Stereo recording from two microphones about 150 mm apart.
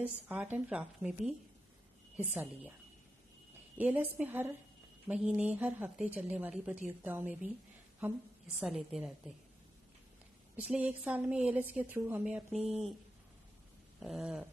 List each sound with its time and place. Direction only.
0.0 s a woman's voice: 10° right (ahead or behind)
2.3 s a woman's voice: 10° right (ahead or behind)
3.7 s a woman's voice: 10° right (ahead or behind)
8.5 s speech: centre (ahead or behind)
10.5 s a woman's voice: 10° right (ahead or behind)
13.9 s a sound: centre (ahead or behind)